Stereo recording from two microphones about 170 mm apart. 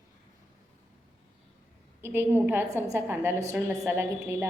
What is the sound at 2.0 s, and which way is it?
A woman's voice, 15° right (ahead or behind).